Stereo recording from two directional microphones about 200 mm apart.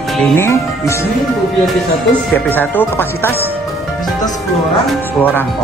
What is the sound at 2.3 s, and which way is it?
Speech, 10° left (ahead or behind).